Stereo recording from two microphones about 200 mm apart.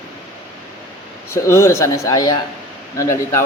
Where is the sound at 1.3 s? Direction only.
15° left (ahead or behind).